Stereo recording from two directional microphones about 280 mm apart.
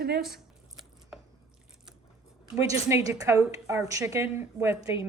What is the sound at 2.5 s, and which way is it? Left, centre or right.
A woman's voice, centre.